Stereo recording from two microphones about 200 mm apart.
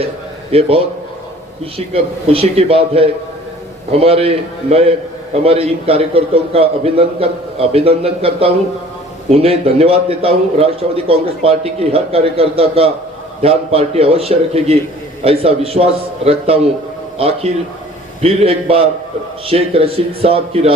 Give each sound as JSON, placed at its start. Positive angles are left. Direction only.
{"t": 1.9, "sound": "a man's voice", "side_deg": -30}